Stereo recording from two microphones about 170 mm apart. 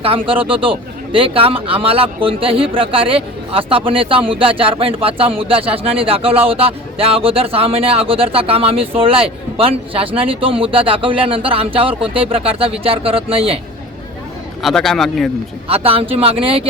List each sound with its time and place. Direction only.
0.0 s speech: 30° right (ahead or behind)
14.6 s speech: centre (ahead or behind)
15.7 s speech: 35° right (ahead or behind)